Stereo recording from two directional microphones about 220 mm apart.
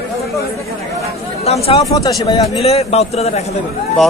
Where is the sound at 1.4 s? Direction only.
30° left (ahead or behind).